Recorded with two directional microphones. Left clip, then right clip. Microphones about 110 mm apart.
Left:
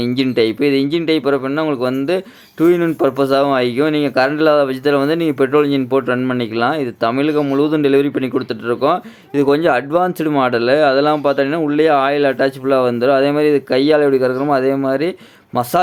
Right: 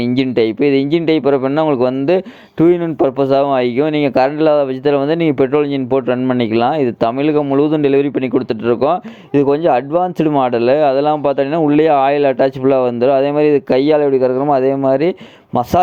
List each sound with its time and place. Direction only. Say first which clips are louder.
0.0 s speech: right 1 dB; 35° right (ahead or behind)